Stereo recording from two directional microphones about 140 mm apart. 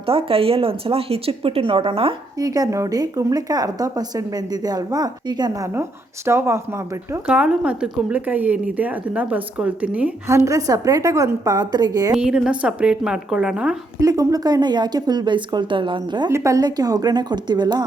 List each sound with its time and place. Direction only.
0.0 s speech: 40° right (ahead or behind)
2.4 s speech: 25° right (ahead or behind)
7.3 s a woman's voice: 5° right (ahead or behind)
10.2 s speech: 20° right (ahead or behind)
12.1 s a woman's voice: 5° right (ahead or behind)
14.0 s speech: 25° right (ahead or behind)
16.3 s speech: 20° right (ahead or behind)